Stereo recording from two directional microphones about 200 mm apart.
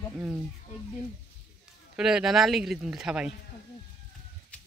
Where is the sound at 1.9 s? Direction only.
5° right (ahead or behind).